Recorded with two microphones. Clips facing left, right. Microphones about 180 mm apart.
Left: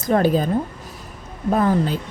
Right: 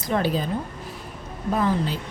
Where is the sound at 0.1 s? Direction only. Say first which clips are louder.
Left 6 dB; 50° left (ahead or behind).